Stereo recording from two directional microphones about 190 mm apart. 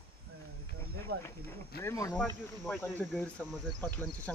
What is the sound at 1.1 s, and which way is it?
Speech, 60° right (ahead or behind).